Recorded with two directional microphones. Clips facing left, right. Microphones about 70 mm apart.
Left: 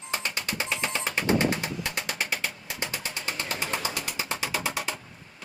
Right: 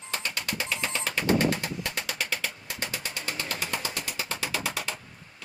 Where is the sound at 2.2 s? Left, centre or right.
Centre.